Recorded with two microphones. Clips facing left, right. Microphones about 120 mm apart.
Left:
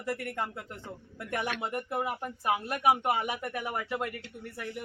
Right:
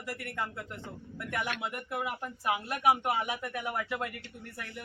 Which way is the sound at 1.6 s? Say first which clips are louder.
Left 3 dB; 35° left (ahead or behind).